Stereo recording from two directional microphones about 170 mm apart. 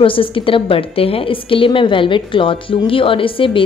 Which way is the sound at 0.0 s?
30° left (ahead or behind).